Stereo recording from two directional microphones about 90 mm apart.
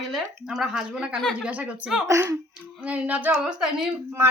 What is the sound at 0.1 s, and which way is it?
A woman's voice, 5° right (ahead or behind).